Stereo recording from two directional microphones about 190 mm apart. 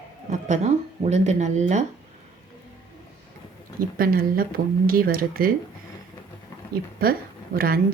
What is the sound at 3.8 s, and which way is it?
Speech, 50° right (ahead or behind).